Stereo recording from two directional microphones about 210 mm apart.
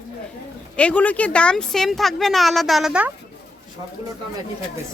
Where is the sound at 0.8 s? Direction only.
5° left (ahead or behind).